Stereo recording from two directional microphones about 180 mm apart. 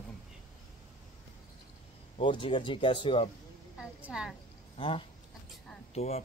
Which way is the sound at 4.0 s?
5° right (ahead or behind).